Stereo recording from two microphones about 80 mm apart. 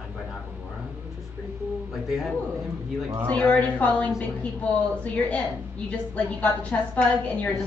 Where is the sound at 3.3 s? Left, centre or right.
Centre.